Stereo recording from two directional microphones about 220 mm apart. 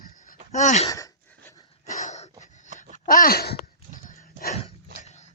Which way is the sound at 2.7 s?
35° right (ahead or behind).